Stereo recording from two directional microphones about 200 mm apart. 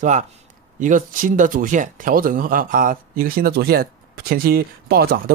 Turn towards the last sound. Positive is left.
turn(degrees=-50)  # may be behind; listen again after turning